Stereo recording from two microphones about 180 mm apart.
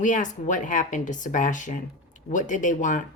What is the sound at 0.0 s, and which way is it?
A woman's voice, 45° left (ahead or behind).